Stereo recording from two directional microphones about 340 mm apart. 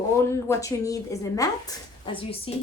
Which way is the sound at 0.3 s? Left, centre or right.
Centre.